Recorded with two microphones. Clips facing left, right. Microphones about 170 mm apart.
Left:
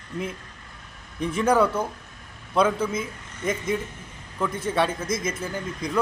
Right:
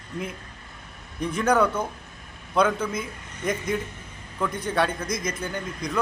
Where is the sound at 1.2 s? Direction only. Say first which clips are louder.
Left 1 dB; 5° left (ahead or behind).